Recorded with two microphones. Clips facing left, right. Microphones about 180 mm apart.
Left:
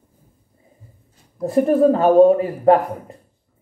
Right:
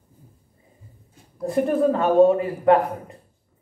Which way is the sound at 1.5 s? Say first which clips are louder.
Left 5 dB; 35° left (ahead or behind).